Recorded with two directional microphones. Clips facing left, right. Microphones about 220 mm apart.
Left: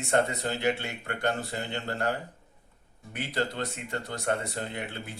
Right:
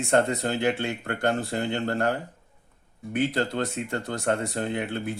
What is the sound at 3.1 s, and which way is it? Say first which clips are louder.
Speech: right 6 dB; 50° right (ahead or behind).